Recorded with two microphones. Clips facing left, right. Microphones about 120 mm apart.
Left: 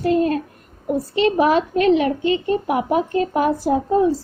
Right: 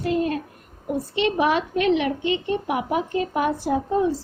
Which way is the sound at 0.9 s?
40° left (ahead or behind).